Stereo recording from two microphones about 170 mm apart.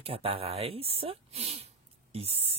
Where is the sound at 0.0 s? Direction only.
35° right (ahead or behind).